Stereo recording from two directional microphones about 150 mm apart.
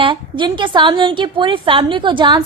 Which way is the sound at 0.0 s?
35° right (ahead or behind).